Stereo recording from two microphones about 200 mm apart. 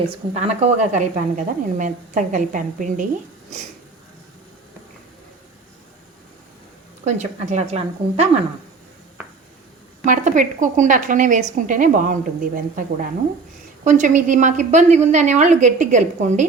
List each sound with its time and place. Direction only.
0.0 s speech: 35° right (ahead or behind)
7.0 s speech: 35° right (ahead or behind)
10.1 s speech: 40° right (ahead or behind)